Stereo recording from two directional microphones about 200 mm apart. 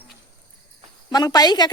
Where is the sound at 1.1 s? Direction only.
20° left (ahead or behind).